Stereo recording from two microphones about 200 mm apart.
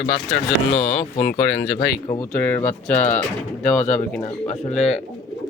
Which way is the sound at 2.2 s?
10° left (ahead or behind).